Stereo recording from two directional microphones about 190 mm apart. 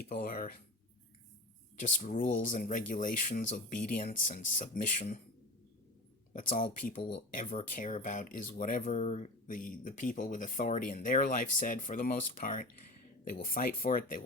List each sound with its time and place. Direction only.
0.0 s speech: 50° left (ahead or behind)
1.7 s speech: 40° left (ahead or behind)
7.1 s speech: 45° left (ahead or behind)